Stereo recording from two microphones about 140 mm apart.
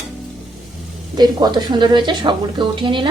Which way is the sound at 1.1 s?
30° right (ahead or behind).